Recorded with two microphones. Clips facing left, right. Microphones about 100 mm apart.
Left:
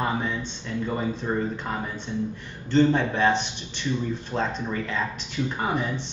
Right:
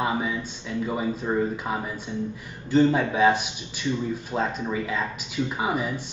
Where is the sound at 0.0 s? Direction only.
5° right (ahead or behind).